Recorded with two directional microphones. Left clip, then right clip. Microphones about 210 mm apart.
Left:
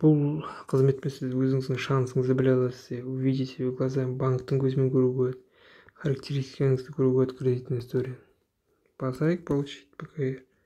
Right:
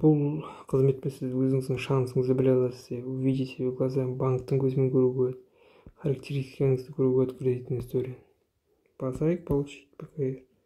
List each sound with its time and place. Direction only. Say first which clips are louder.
0.0 s speech: left 1 dB; 15° left (ahead or behind)
3.3 s speech: even; 50° left (ahead or behind)
3.9 s speech: even; 10° left (ahead or behind)